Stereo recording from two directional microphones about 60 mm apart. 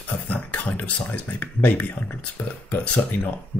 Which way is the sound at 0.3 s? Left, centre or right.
Left.